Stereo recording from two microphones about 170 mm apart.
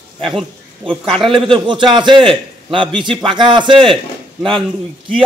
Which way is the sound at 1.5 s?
30° right (ahead or behind).